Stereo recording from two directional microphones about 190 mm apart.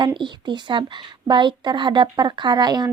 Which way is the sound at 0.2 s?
25° right (ahead or behind).